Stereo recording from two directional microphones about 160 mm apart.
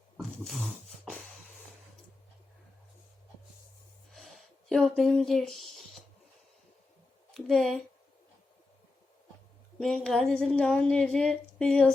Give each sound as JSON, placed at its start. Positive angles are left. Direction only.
{"t": 0.2, "sound": "a sound", "side_deg": 0}
{"t": 4.7, "sound": "speech", "side_deg": 5}
{"t": 7.3, "sound": "speech", "side_deg": 0}
{"t": 9.8, "sound": "speech", "side_deg": 0}